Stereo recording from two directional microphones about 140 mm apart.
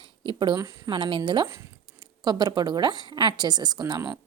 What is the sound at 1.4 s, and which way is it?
Speech, 20° right (ahead or behind).